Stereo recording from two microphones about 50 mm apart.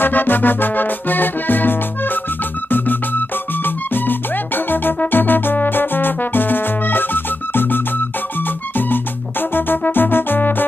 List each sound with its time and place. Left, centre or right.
0.0 s music: left
9.5 s music: left